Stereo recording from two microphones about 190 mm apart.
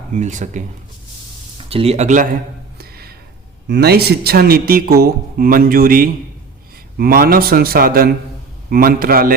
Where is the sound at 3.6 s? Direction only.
60° right (ahead or behind).